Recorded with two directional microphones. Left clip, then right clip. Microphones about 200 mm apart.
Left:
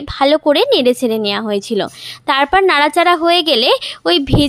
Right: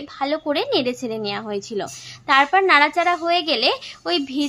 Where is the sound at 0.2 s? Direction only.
40° left (ahead or behind).